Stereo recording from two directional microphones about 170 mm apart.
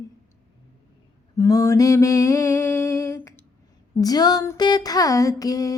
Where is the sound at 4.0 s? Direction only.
20° left (ahead or behind).